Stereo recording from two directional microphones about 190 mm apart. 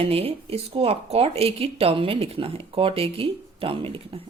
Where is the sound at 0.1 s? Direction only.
30° right (ahead or behind).